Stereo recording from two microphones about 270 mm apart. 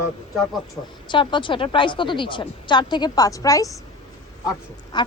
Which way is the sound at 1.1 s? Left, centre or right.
Centre.